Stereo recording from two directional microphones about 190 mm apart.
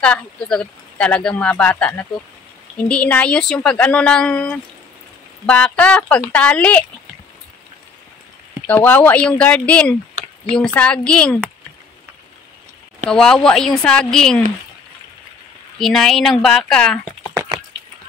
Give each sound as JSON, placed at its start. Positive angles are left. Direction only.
{"t": 0.0, "sound": "speech", "side_deg": 5}
{"t": 8.6, "sound": "speech", "side_deg": 10}
{"t": 13.1, "sound": "speech", "side_deg": 5}
{"t": 15.8, "sound": "speech", "side_deg": 0}
{"t": 17.3, "sound": "a sound", "side_deg": -15}